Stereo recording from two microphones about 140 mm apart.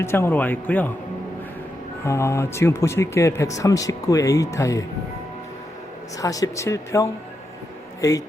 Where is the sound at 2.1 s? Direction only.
20° left (ahead or behind).